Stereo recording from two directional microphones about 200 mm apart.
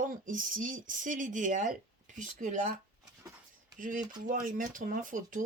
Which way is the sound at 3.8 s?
40° right (ahead or behind).